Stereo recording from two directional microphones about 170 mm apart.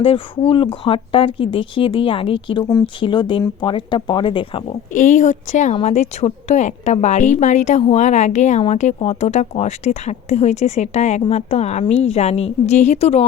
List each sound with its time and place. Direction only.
0.0 s a woman's voice: 35° left (ahead or behind)
4.9 s a woman's voice: 45° left (ahead or behind)